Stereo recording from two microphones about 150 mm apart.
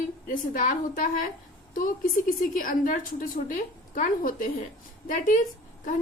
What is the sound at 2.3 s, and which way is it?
A woman's voice, 65° left (ahead or behind).